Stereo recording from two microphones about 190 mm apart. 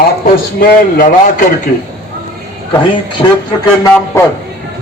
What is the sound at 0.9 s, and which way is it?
Speech, 45° left (ahead or behind).